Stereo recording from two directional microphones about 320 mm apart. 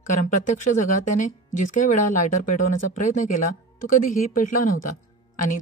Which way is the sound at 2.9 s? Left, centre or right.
Left.